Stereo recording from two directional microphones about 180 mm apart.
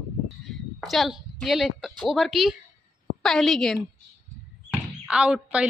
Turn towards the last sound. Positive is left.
turn(degrees=-5)  # may be behind; listen again after turning